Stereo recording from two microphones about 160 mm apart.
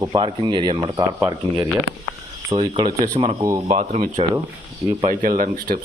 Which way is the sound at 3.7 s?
45° right (ahead or behind).